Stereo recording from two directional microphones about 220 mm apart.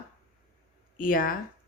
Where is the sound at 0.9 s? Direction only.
40° left (ahead or behind).